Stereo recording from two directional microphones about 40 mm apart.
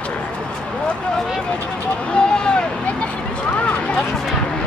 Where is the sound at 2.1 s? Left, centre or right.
Left.